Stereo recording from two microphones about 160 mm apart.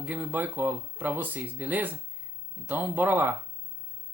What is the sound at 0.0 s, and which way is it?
Speech, 10° right (ahead or behind).